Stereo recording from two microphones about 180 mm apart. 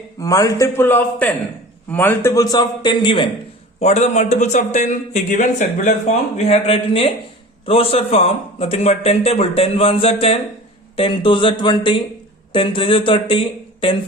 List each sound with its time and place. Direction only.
0.2 s a man's voice: 20° left (ahead or behind)
3.8 s a man's voice: 40° left (ahead or behind)